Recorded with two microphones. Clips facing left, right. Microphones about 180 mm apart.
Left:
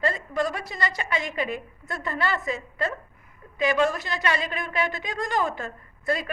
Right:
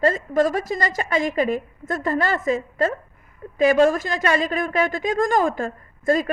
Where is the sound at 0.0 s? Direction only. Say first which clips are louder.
Right 7 dB; 45° right (ahead or behind).